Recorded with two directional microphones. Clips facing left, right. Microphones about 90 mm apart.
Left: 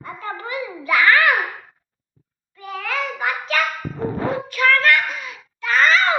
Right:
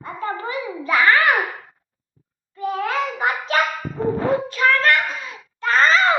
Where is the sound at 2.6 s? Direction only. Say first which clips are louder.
Right 4 dB; 25° right (ahead or behind).